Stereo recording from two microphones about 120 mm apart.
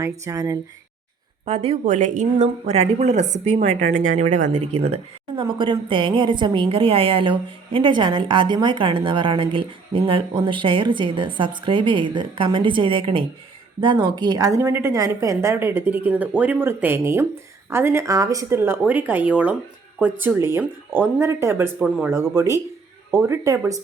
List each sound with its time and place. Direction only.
0.0 s a woman's voice: 30° right (ahead or behind)
1.5 s speech: 60° right (ahead or behind)
1.8 s speech: 90° right; by 3.7 s 70° right (ahead or behind)
4.1 s speech: 90° right; by 4.9 s 70° right (ahead or behind)
5.4 s a woman's voice: 45° right (ahead or behind); by 21.7 s 20° right (ahead or behind)
21.8 s speech: 10° right (ahead or behind)
22.1 s a woman's voice: 20° right (ahead or behind)